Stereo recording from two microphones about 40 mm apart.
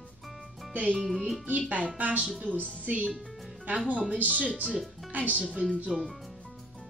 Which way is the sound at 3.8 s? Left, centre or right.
Right.